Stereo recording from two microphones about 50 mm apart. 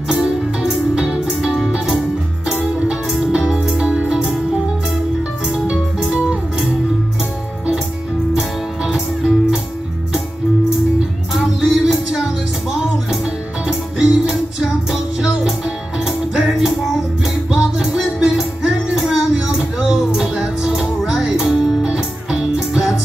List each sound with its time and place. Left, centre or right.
0.1 s music: centre
2.9 s music: centre
5.5 s music: centre
8.4 s music: centre
11.3 s music: centre
11.8 s music: centre
13.2 s music: centre